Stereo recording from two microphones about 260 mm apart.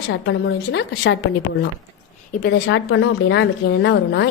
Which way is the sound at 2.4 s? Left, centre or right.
Left.